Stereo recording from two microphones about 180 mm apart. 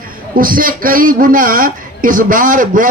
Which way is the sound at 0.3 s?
50° right (ahead or behind).